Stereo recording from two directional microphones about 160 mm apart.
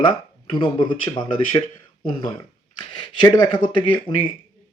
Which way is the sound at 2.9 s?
25° left (ahead or behind).